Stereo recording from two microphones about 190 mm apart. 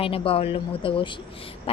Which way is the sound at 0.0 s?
30° left (ahead or behind).